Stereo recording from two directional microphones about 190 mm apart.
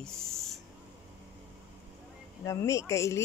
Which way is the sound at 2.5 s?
15° left (ahead or behind).